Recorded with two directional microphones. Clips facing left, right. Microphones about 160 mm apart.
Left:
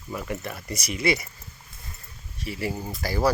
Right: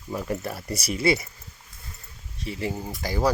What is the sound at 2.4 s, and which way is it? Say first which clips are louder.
Speech: even; 25° right (ahead or behind).